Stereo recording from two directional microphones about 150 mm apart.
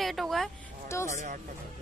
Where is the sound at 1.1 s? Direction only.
50° right (ahead or behind).